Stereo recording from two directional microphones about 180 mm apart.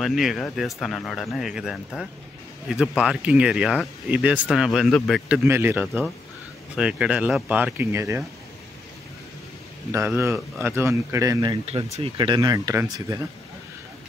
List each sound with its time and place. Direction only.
0.0 s speech: centre (ahead or behind)
5.4 s speech: 10° right (ahead or behind)
9.9 s speech: 10° right (ahead or behind)